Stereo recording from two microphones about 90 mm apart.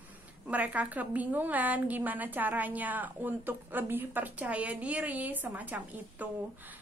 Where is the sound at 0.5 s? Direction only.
15° right (ahead or behind).